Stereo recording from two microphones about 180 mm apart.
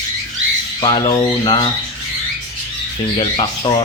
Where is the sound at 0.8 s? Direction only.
25° left (ahead or behind).